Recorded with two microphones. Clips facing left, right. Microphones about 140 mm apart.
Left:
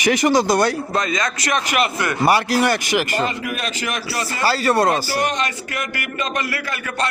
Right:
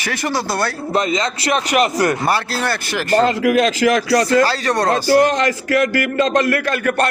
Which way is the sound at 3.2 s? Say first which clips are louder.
Right 9 dB; 90° right.